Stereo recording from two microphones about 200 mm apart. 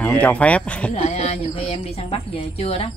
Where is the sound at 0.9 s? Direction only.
30° left (ahead or behind).